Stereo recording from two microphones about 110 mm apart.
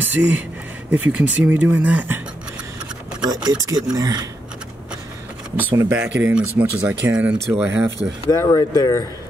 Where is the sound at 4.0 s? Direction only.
35° right (ahead or behind).